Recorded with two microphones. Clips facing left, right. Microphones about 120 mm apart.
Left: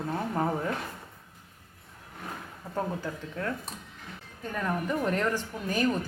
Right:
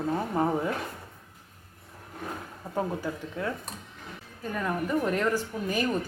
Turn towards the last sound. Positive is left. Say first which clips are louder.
# left 1 dB
turn(degrees=-10)  # may be behind; listen again after turning